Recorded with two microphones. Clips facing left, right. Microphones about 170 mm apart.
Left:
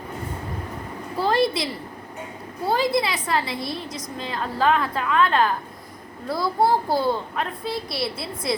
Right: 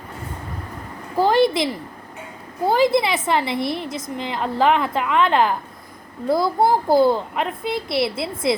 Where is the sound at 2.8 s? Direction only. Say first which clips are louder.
Right 7 dB; 25° right (ahead or behind).